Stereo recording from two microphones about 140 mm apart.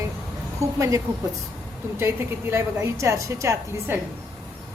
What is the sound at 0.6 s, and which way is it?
A woman's voice, 25° right (ahead or behind).